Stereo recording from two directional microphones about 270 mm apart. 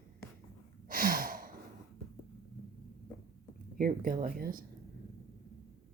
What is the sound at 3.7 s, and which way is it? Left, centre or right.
Speech, right.